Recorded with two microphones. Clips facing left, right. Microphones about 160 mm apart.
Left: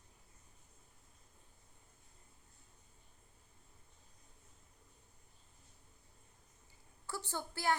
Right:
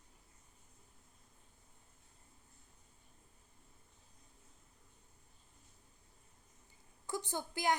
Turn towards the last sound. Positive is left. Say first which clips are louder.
# right 1 dB
turn(degrees=-15)  # may be behind; listen again after turning